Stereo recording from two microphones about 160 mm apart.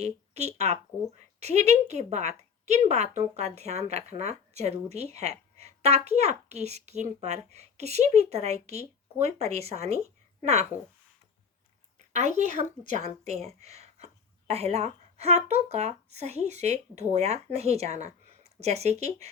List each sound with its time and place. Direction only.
0.0 s a woman's voice: 40° right (ahead or behind)
11.9 s a woman's voice: 45° right (ahead or behind)